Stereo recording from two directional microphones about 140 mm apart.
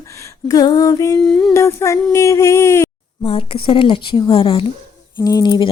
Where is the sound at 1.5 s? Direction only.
20° left (ahead or behind).